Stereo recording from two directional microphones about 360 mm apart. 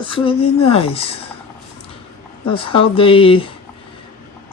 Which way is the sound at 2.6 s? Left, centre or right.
Centre.